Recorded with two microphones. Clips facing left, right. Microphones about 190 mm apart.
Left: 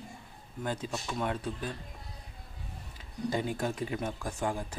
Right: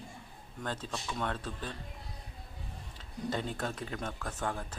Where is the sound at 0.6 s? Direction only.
10° left (ahead or behind).